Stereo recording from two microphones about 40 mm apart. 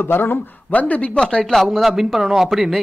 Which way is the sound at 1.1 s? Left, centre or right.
Centre.